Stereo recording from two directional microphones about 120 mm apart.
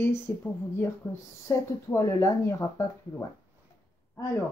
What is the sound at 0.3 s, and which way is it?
Speech, 15° left (ahead or behind).